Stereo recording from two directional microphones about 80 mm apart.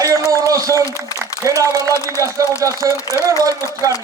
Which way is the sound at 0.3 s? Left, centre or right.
Right.